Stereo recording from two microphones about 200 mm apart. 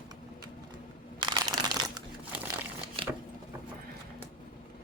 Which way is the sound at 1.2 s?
20° right (ahead or behind).